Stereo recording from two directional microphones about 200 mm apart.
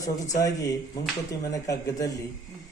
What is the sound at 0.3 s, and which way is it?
Speech, 15° left (ahead or behind).